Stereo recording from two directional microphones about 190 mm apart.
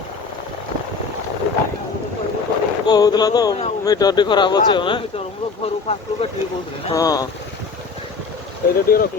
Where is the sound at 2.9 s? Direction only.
20° left (ahead or behind).